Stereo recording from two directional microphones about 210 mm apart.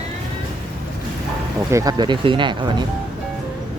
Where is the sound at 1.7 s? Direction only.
15° right (ahead or behind).